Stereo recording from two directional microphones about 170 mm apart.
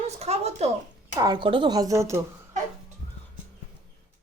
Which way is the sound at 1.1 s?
25° right (ahead or behind).